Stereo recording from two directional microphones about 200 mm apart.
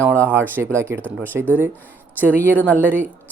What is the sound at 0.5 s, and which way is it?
Speech, 10° right (ahead or behind).